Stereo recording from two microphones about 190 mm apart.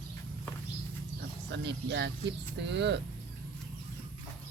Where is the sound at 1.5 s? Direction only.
65° right (ahead or behind).